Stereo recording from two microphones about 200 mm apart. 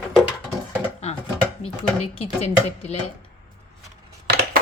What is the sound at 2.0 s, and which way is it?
A woman's voice, 30° left (ahead or behind).